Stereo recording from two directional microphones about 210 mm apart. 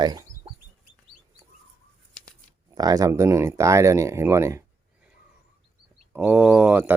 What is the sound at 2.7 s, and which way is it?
Speech, 20° right (ahead or behind).